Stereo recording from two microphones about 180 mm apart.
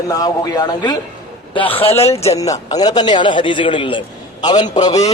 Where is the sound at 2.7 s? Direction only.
20° left (ahead or behind).